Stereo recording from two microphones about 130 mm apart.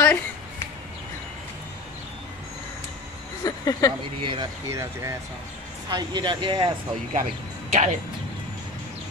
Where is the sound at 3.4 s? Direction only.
25° left (ahead or behind).